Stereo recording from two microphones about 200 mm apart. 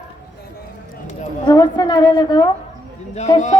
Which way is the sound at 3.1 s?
35° left (ahead or behind).